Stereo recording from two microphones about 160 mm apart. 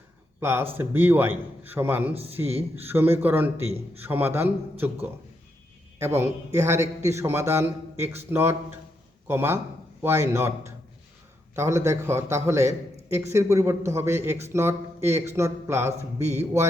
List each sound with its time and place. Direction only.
0.3 s a man's voice: 15° right (ahead or behind)
6.1 s a man's voice: 15° right (ahead or behind)